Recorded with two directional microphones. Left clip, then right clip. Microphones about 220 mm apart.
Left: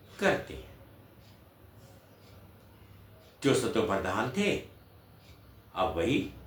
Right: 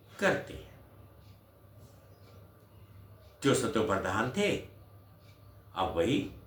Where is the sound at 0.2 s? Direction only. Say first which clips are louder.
Left 1 dB; 15° right (ahead or behind).